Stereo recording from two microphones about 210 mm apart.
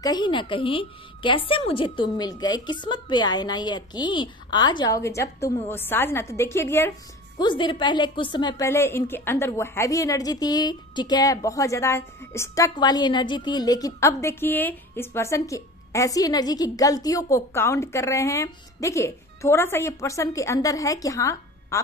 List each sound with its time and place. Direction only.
0.0 s a woman's voice: 20° left (ahead or behind)